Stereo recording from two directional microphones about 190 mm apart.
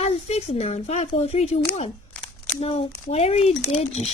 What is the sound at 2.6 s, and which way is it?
A woman's voice, 30° left (ahead or behind).